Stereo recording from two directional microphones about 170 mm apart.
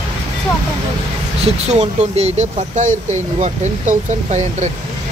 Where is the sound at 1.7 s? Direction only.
40° right (ahead or behind).